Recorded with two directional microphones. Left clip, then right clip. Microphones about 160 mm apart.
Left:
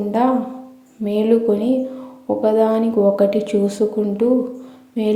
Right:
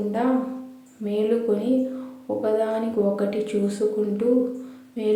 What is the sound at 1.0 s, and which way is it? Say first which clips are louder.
Speech: left 6 dB; 30° left (ahead or behind).